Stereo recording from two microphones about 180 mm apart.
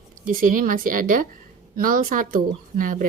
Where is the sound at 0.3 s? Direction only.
50° right (ahead or behind).